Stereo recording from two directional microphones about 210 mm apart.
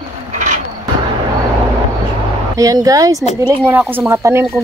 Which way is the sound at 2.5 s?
15° right (ahead or behind).